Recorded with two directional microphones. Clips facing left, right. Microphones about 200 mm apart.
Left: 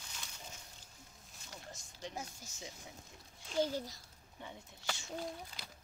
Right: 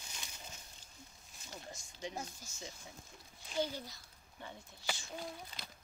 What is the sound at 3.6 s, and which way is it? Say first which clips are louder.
Speech: left 3 dB; 40° left (ahead or behind).